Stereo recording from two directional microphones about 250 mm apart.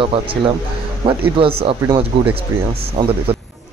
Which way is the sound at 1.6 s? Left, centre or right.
Right.